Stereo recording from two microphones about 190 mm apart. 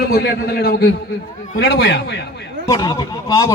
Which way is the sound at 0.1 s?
55° left (ahead or behind).